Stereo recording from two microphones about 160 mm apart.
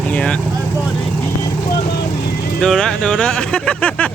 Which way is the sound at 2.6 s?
5° left (ahead or behind).